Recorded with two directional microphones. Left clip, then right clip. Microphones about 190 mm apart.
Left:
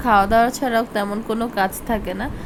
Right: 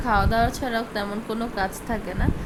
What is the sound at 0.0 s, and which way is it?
A woman's voice, 15° left (ahead or behind).